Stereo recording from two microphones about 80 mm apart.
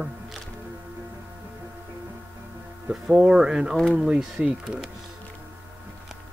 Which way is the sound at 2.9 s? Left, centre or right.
Centre.